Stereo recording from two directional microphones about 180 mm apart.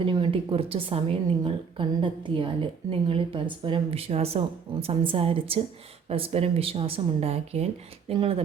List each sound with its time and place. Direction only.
0.0 s a woman's voice: 30° right (ahead or behind)